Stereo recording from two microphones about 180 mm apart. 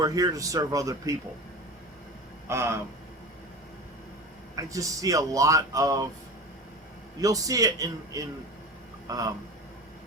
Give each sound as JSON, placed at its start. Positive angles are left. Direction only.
{"t": 0.0, "sound": "speech", "side_deg": -20}
{"t": 2.5, "sound": "speech", "side_deg": -15}
{"t": 4.5, "sound": "speech", "side_deg": -20}
{"t": 7.2, "sound": "speech", "side_deg": -20}